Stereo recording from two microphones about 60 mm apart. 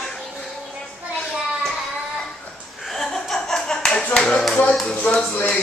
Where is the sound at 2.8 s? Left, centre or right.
Centre.